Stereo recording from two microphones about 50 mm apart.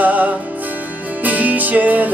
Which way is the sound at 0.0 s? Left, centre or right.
Right.